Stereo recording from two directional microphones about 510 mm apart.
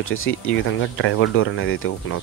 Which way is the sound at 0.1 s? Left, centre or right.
Left.